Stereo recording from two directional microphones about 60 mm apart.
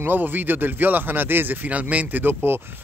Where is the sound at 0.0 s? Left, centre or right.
Right.